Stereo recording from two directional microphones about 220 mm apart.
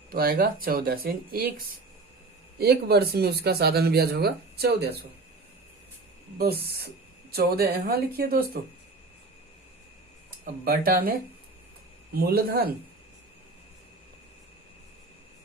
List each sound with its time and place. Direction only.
0.1 s speech: 40° right (ahead or behind)
6.4 s speech: 45° right (ahead or behind)
10.4 s speech: 40° right (ahead or behind)
12.1 s speech: 45° right (ahead or behind)